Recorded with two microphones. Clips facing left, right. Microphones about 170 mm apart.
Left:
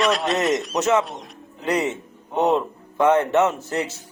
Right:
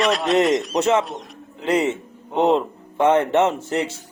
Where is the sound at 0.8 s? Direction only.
25° right (ahead or behind).